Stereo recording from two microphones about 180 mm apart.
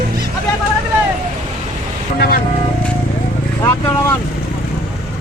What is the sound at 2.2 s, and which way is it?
Speech, 55° left (ahead or behind).